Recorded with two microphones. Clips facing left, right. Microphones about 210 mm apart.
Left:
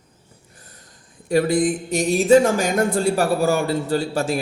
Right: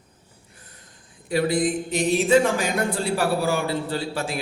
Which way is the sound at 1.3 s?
45° left (ahead or behind).